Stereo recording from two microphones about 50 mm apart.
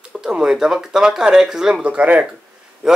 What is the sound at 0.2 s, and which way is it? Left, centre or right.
Speech, centre.